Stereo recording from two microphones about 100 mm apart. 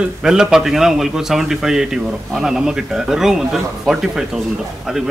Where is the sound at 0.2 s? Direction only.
5° right (ahead or behind).